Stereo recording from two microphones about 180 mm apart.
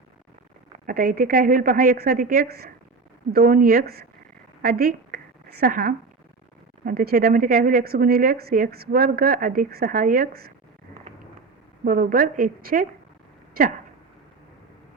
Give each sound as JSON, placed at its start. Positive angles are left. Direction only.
{"t": 0.9, "sound": "a woman's voice", "side_deg": -50}
{"t": 4.6, "sound": "a sound", "side_deg": -55}
{"t": 6.8, "sound": "a woman's voice", "side_deg": -55}
{"t": 11.9, "sound": "a woman's voice", "side_deg": -50}